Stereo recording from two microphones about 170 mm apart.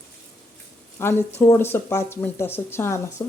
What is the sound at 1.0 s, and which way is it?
Speech, 15° left (ahead or behind).